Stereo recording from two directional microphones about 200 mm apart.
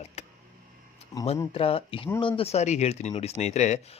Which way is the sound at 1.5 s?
30° left (ahead or behind).